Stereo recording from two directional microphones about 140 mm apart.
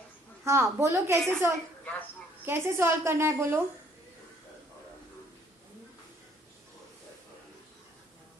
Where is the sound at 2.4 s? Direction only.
15° right (ahead or behind).